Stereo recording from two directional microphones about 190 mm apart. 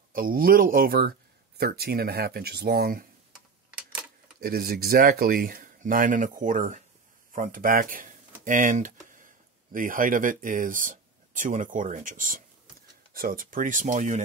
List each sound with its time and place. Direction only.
0.1 s speech: 50° right (ahead or behind)
4.4 s speech: 50° right (ahead or behind)